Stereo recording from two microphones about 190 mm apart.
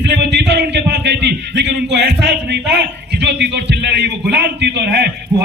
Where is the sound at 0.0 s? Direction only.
65° right (ahead or behind).